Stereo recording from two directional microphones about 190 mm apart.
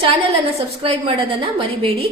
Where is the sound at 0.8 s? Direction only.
30° right (ahead or behind).